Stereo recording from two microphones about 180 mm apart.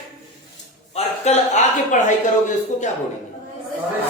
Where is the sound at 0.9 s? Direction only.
35° left (ahead or behind).